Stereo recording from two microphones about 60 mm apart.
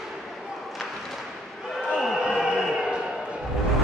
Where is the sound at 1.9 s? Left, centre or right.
Centre.